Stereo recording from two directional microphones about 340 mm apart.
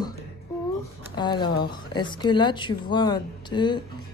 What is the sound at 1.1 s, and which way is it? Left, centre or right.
Speech, centre.